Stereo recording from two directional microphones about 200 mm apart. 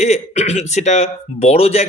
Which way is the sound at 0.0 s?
35° left (ahead or behind).